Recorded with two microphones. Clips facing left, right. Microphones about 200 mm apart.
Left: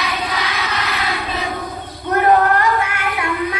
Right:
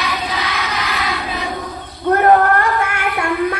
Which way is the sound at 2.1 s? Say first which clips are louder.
Right 1 dB; 50° right (ahead or behind).